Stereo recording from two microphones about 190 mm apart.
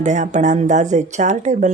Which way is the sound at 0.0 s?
40° right (ahead or behind).